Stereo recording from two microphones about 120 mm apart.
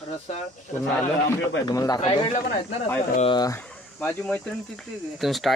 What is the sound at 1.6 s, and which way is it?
Speech, 30° left (ahead or behind).